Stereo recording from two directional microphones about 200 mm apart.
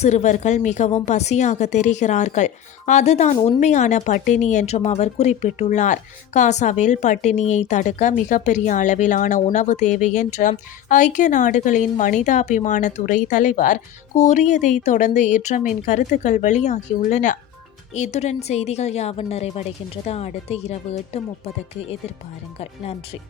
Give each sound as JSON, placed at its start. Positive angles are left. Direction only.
{"t": 0.0, "sound": "a woman's voice", "side_deg": 35}